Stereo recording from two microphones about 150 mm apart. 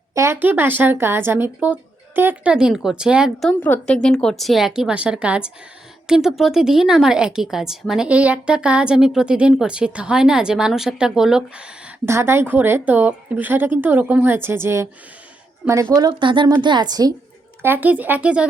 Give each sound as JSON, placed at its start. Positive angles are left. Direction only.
{"t": 0.1, "sound": "speech", "side_deg": -20}
{"t": 3.5, "sound": "speech", "side_deg": 10}
{"t": 12.0, "sound": "a woman's voice", "side_deg": -15}
{"t": 16.0, "sound": "a woman's voice", "side_deg": -30}
{"t": 17.6, "sound": "speech", "side_deg": -15}